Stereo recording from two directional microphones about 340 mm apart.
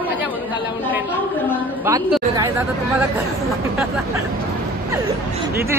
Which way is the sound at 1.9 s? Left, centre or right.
Centre.